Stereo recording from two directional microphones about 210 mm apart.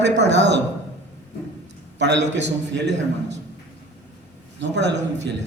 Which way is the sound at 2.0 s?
55° right (ahead or behind).